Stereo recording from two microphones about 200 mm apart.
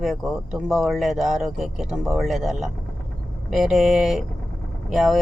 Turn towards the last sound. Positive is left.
turn(degrees=0)  # may be behind; listen again after turning